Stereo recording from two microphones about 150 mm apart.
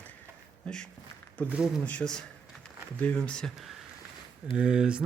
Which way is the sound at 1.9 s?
5° left (ahead or behind).